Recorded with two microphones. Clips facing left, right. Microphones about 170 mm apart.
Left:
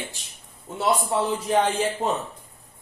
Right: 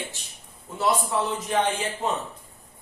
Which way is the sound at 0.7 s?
30° left (ahead or behind).